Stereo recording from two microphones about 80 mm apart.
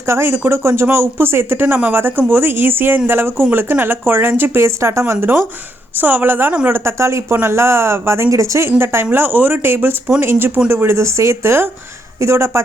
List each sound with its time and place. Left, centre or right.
0.0 s speech: right
6.0 s speech: right